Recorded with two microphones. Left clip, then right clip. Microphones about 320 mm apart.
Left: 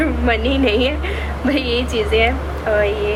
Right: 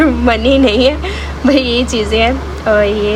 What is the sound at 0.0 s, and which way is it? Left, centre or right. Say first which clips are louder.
A woman's voice: right 7 dB; centre.